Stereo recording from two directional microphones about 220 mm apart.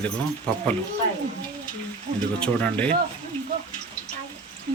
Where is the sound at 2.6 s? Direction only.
5° left (ahead or behind).